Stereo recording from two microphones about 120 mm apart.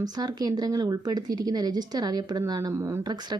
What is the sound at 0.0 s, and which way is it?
Speech, 35° right (ahead or behind).